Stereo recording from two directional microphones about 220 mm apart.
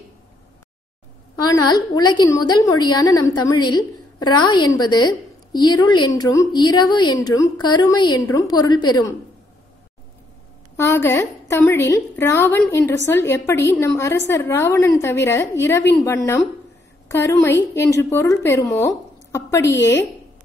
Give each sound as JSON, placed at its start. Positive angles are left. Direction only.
{"t": 1.4, "sound": "a woman's voice", "side_deg": 20}
{"t": 10.8, "sound": "a woman's voice", "side_deg": 10}
{"t": 17.1, "sound": "a woman's voice", "side_deg": 10}